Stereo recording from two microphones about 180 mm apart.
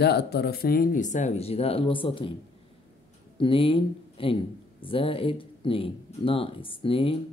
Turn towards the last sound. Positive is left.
turn(degrees=30)  # may be behind; listen again after turning